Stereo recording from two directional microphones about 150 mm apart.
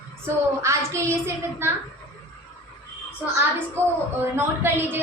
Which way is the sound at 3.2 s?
15° right (ahead or behind).